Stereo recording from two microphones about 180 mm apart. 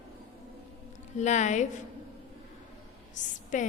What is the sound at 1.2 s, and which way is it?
Speech, 40° left (ahead or behind).